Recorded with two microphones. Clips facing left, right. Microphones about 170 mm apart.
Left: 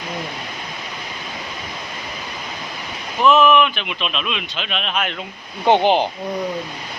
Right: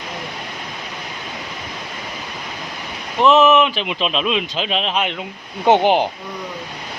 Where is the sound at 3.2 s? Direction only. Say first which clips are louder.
Right 1 dB; 25° right (ahead or behind).